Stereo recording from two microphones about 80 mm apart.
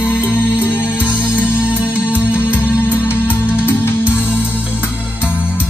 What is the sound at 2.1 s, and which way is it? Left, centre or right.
Music, left.